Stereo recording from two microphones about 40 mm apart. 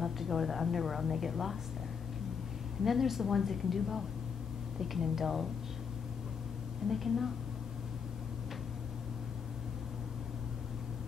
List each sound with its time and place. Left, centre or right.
0.0 s a woman's voice: centre
2.8 s a woman's voice: centre
6.9 s a woman's voice: centre